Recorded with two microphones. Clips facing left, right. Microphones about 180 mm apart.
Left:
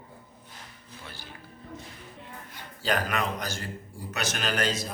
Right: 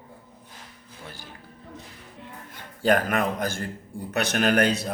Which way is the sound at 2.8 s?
50° right (ahead or behind).